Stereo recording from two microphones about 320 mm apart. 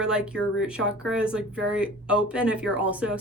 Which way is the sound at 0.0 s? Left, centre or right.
Centre.